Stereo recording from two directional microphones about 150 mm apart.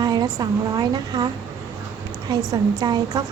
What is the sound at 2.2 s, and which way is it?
Speech, 25° right (ahead or behind).